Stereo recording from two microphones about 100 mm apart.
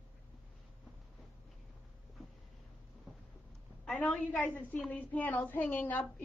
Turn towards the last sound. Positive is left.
turn(degrees=15)  # may be behind; listen again after turning